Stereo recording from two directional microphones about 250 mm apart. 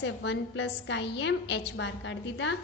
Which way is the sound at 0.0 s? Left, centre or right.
Left.